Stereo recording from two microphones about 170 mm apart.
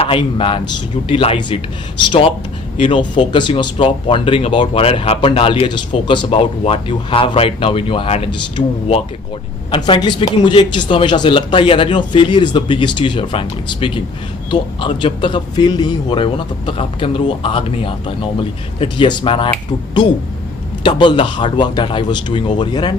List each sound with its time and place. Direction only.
0.0 s speech: 30° left (ahead or behind)
2.7 s speech: 30° left (ahead or behind)
20.8 s speech: 30° left (ahead or behind)